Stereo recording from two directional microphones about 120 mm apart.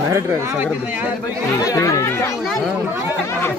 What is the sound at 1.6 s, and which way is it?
Speech, 30° left (ahead or behind).